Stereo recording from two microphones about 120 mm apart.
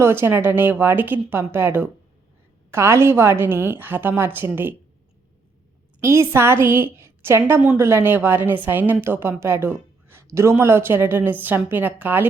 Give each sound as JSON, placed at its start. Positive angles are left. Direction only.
{"t": 0.0, "sound": "a woman's voice", "side_deg": -20}
{"t": 6.0, "sound": "a woman's voice", "side_deg": -20}
{"t": 9.4, "sound": "a sound", "side_deg": -20}
{"t": 10.3, "sound": "a woman's voice", "side_deg": -20}